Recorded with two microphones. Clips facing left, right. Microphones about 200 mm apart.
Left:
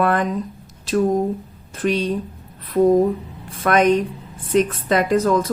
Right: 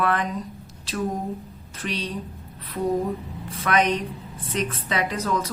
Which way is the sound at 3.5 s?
50° left (ahead or behind).